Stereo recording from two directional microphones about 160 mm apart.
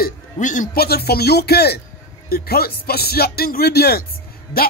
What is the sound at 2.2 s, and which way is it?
Speech, 75° left (ahead or behind).